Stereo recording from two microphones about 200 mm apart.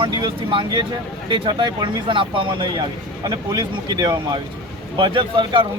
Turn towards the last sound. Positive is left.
turn(degrees=-25)  # may be behind; listen again after turning